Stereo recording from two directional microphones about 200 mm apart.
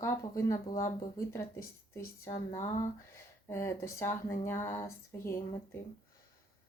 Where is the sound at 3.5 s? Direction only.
15° left (ahead or behind).